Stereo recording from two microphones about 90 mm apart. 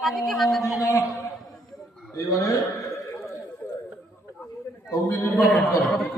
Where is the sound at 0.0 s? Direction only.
Centre (ahead or behind).